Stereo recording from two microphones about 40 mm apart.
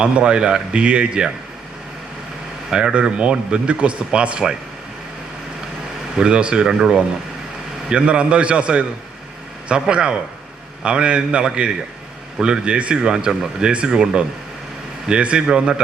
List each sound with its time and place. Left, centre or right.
0.0 s speech: right
2.7 s speech: right
6.1 s speech: right